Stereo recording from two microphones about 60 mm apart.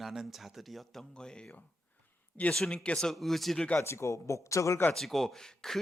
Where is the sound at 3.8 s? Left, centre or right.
Left.